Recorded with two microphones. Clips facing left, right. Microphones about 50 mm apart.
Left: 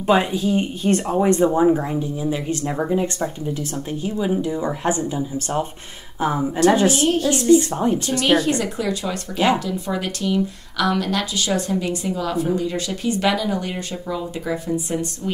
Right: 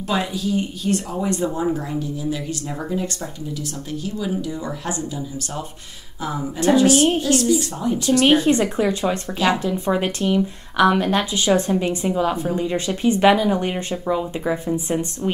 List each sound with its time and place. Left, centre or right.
0.0 s speech: left
8.3 s speech: right